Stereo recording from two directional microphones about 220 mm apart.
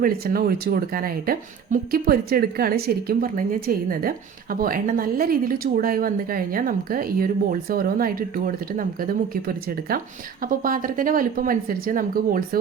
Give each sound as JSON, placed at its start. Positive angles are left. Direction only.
{"t": 0.0, "sound": "speech", "side_deg": -40}